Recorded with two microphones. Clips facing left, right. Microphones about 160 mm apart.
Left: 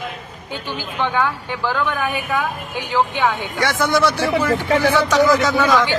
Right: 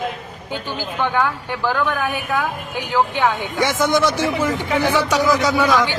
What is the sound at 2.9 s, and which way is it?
Speech, 10° right (ahead or behind).